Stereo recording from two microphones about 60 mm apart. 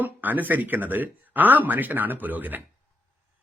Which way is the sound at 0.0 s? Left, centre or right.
Right.